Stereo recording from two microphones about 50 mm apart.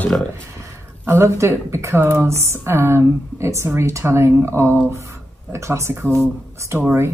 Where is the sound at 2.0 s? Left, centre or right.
Right.